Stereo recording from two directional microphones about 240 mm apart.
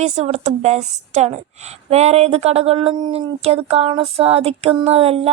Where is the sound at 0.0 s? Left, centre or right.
Right.